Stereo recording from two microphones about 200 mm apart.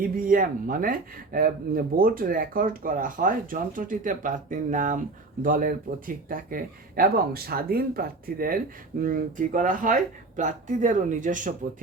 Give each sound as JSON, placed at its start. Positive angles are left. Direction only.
{"t": 0.0, "sound": "speech", "side_deg": -45}